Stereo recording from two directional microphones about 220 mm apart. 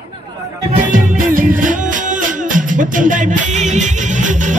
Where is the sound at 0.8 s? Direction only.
35° right (ahead or behind).